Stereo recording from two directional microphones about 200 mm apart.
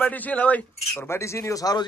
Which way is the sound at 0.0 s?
10° left (ahead or behind).